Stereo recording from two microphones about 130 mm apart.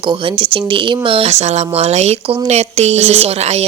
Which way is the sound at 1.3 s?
60° right (ahead or behind).